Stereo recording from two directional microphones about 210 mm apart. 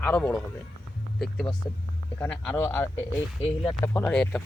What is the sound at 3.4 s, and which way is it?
Speech, 25° left (ahead or behind).